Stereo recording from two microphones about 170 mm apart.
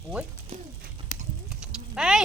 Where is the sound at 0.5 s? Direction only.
40° right (ahead or behind).